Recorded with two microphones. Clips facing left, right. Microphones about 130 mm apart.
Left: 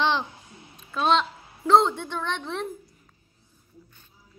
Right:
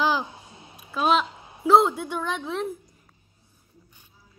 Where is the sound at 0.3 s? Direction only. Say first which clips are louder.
Right 2 dB; 20° right (ahead or behind).